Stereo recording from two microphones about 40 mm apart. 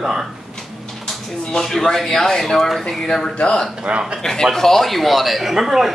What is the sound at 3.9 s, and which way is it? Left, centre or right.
Speech, right.